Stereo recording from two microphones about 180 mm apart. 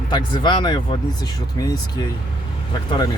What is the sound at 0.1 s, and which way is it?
Speech, 25° left (ahead or behind).